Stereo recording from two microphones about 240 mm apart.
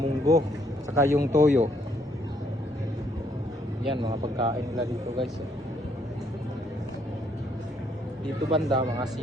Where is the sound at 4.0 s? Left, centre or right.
Centre.